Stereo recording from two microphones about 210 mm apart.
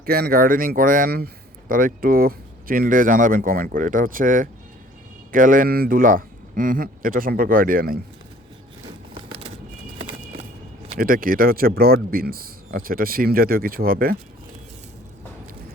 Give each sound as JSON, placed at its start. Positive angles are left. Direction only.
{"t": 0.0, "sound": "speech", "side_deg": -45}
{"t": 10.9, "sound": "speech", "side_deg": -40}